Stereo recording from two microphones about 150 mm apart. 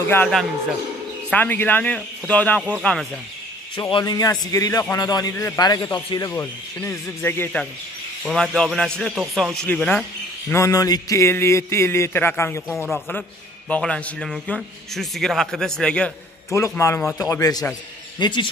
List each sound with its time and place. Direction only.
1.3 s a man's voice: 10° left (ahead or behind)
3.9 s a man's voice: 25° left (ahead or behind)
8.2 s a man's voice: centre (ahead or behind)
10.5 s speech: 20° left (ahead or behind)
12.6 s a man's voice: 5° right (ahead or behind)
13.7 s a man's voice: 10° left (ahead or behind)
16.5 s a man's voice: 20° left (ahead or behind)